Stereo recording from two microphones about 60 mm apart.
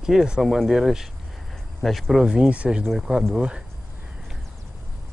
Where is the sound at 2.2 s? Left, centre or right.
Centre.